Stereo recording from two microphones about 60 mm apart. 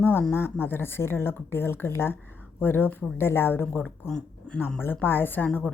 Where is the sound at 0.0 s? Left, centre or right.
Left.